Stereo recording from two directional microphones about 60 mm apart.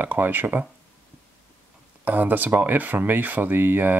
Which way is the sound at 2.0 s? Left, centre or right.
Right.